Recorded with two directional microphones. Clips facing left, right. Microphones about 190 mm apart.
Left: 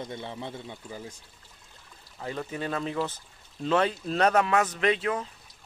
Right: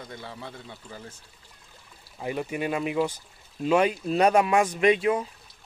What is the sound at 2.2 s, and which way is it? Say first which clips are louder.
Speech: right 4 dB; 15° right (ahead or behind).